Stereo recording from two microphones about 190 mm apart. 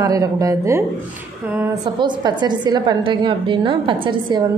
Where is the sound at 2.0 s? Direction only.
25° right (ahead or behind).